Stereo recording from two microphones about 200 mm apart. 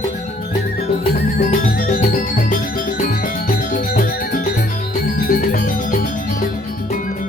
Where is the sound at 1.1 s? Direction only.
45° left (ahead or behind).